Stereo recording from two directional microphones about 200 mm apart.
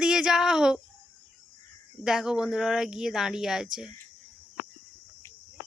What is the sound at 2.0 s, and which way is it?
Speech, 5° right (ahead or behind).